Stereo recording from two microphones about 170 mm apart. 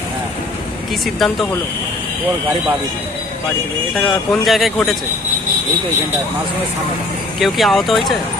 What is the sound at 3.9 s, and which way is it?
Speech, centre (ahead or behind).